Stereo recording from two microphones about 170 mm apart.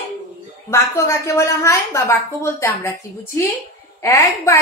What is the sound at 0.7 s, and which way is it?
Speech, 15° left (ahead or behind).